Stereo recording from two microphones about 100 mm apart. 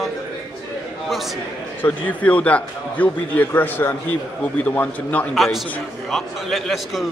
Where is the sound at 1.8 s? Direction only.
15° left (ahead or behind).